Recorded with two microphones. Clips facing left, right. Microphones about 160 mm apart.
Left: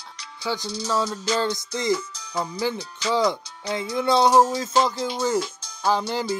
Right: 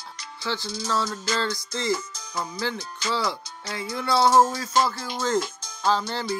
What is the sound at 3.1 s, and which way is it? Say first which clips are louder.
Speech: left 6 dB; 20° left (ahead or behind).